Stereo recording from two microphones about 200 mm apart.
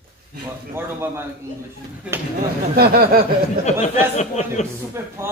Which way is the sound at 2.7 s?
50° right (ahead or behind).